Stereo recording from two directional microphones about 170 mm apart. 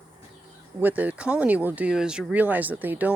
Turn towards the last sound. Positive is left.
turn(degrees=-10)  # may be behind; listen again after turning